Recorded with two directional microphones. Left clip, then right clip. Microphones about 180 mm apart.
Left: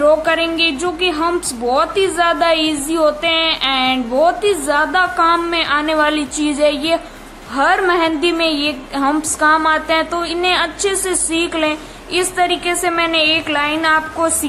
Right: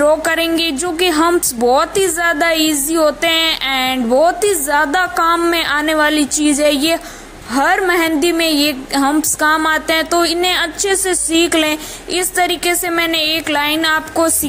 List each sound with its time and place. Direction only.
0.0 s a woman's voice: 40° right (ahead or behind)